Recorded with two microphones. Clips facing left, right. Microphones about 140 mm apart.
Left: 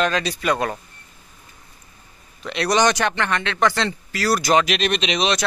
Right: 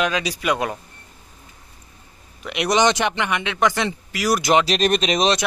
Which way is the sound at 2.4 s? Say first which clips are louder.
Even; 15° right (ahead or behind).